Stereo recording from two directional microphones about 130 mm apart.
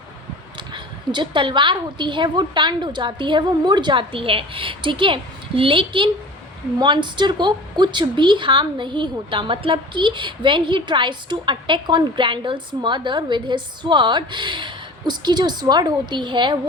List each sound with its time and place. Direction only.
0.5 s a woman's voice: 35° right (ahead or behind)